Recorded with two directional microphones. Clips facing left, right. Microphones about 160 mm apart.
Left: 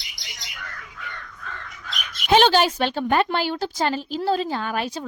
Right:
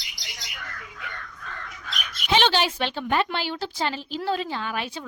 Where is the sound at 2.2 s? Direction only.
45° left (ahead or behind).